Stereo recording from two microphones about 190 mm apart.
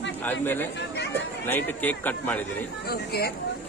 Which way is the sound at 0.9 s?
65° left (ahead or behind).